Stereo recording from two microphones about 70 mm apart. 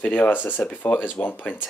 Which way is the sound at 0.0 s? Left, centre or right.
Left.